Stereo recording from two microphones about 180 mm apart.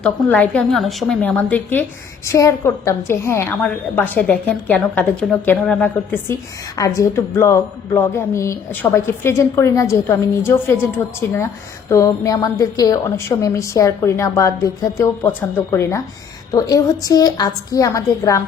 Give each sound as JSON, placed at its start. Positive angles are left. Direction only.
{"t": 0.0, "sound": "a woman's voice", "side_deg": 10}